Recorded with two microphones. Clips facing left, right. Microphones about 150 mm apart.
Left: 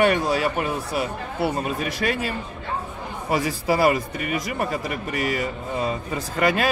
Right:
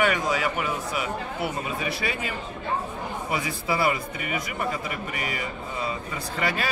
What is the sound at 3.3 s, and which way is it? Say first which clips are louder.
Speech: left 6 dB; 45° left (ahead or behind).